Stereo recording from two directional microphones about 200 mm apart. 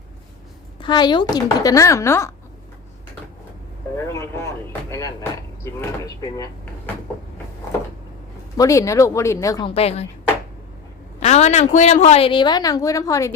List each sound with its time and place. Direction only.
0.8 s speech: 20° left (ahead or behind)
3.9 s speech: 15° left (ahead or behind)
8.5 s speech: 15° left (ahead or behind)
11.2 s a woman's voice: 35° left (ahead or behind); by 13.3 s 15° left (ahead or behind)